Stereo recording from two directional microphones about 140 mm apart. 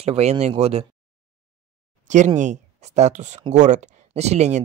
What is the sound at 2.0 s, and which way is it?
Speech, 60° right (ahead or behind).